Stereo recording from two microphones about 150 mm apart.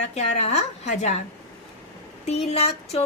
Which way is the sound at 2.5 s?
45° left (ahead or behind).